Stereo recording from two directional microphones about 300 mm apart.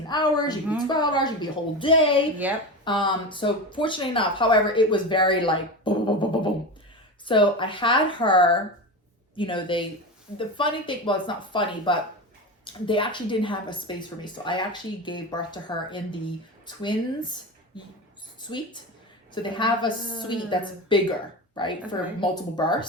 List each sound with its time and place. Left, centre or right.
0.1 s a woman's voice: centre
2.4 s speech: centre
2.8 s a woman's voice: centre
18.4 s a woman's voice: centre